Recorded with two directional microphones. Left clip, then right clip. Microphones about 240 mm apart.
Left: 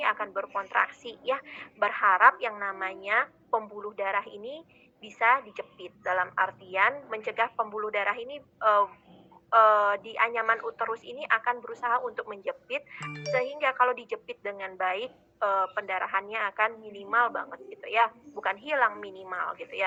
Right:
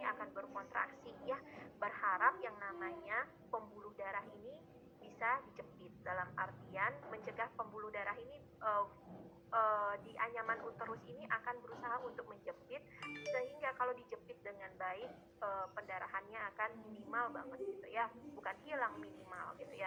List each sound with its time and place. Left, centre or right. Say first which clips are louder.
0.0 s a woman's voice: left 15 dB; left